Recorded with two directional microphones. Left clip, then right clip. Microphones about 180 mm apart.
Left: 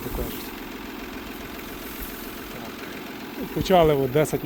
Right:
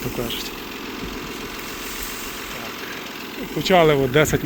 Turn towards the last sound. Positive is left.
turn(degrees=5)  # may be behind; listen again after turning